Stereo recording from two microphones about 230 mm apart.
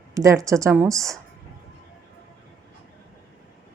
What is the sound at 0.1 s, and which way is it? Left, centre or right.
A woman's voice, centre.